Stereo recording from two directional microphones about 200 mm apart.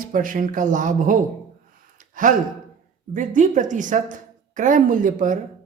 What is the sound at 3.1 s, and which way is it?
A woman's voice, 40° right (ahead or behind).